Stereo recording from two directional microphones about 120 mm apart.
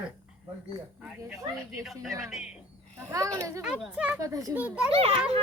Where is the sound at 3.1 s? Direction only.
30° right (ahead or behind).